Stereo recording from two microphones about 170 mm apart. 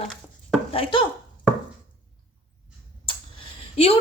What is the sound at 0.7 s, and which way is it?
Speech, 30° left (ahead or behind).